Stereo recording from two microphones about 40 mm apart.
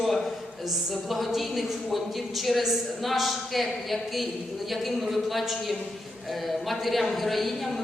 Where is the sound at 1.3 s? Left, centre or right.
Centre.